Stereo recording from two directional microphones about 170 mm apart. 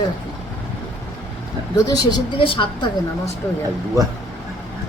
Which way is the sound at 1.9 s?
25° left (ahead or behind).